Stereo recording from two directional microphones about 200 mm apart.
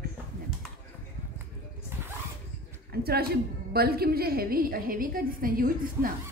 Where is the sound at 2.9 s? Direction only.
50° right (ahead or behind).